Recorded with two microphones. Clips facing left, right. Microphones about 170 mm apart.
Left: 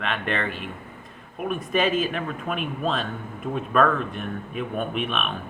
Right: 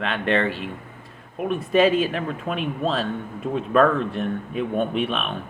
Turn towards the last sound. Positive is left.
turn(degrees=-30)  # may be behind; listen again after turning